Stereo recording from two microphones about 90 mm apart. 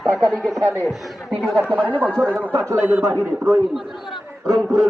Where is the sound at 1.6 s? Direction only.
15° right (ahead or behind).